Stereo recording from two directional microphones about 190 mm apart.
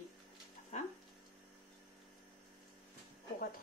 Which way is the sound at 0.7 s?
35° left (ahead or behind).